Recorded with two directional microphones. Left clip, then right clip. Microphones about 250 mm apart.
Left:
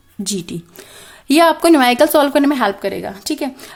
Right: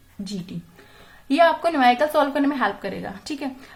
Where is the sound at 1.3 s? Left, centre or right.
Left.